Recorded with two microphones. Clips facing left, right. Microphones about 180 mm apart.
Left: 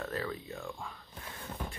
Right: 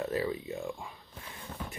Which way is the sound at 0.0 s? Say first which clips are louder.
Right 5 dB; 15° right (ahead or behind).